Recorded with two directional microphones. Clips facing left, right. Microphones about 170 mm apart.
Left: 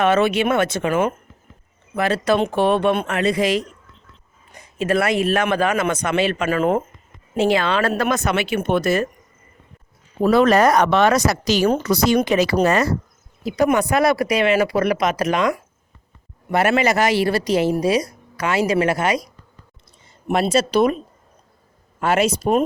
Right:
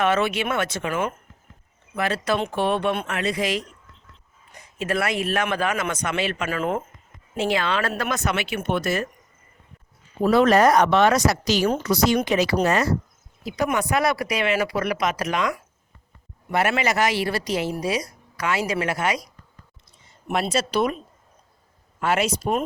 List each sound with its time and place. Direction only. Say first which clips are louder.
0.0 s speech: left 5 dB; 25° left (ahead or behind)
4.8 s speech: left 6 dB; 30° left (ahead or behind)
10.2 s speech: left 2 dB; 75° left (ahead or behind)
11.9 s speech: left 3 dB; 45° left (ahead or behind)
13.4 s speech: left 6 dB; 35° left (ahead or behind)
20.2 s speech: left 6 dB; 30° left (ahead or behind)
22.0 s speech: left 4 dB; 35° left (ahead or behind)